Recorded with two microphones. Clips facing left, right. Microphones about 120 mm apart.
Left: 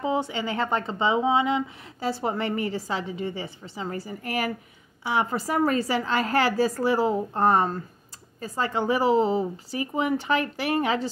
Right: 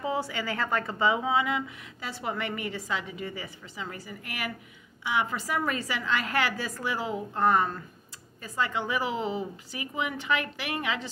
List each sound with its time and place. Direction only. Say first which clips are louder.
0.0 s a woman's voice: left 4 dB; 25° left (ahead or behind)